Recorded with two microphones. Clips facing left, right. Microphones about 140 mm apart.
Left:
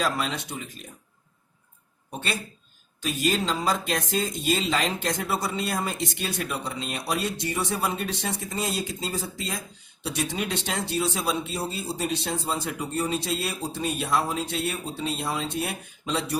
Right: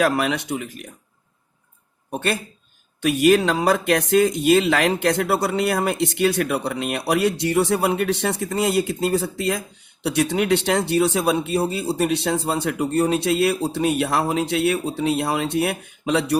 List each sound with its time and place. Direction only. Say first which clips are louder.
0.0 s speech: right 7 dB; 70° right (ahead or behind)
2.1 s speech: right 8 dB; 55° right (ahead or behind)
3.0 s speech: right 10 dB; 65° right (ahead or behind)